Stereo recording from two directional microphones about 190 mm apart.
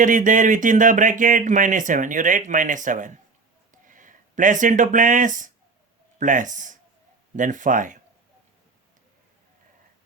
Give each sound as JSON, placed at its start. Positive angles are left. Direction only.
{"t": 0.0, "sound": "speech", "side_deg": -45}